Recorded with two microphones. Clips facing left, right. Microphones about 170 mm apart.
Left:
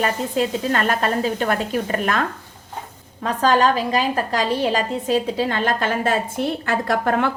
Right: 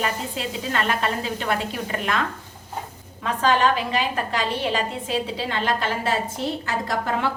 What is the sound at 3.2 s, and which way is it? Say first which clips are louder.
A woman's voice: left 3 dB; 40° left (ahead or behind).